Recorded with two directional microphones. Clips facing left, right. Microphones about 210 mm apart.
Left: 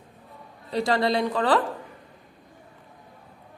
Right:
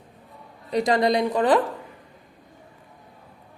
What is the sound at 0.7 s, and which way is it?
Speech, 20° right (ahead or behind).